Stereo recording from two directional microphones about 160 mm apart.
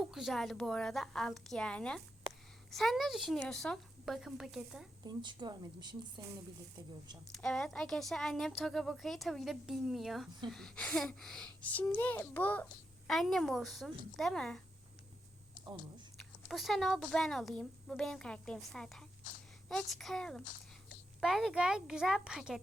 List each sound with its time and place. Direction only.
0.0 s a woman's voice: centre (ahead or behind)
5.0 s speech: 25° right (ahead or behind)
7.3 s a woman's voice: 5° left (ahead or behind)
15.6 s speech: 25° right (ahead or behind)
16.1 s a woman's voice: centre (ahead or behind)